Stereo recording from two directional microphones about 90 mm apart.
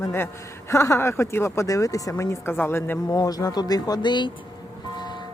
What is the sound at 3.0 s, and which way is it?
Speech, 50° left (ahead or behind).